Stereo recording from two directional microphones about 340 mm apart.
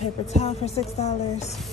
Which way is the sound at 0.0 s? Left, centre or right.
Centre.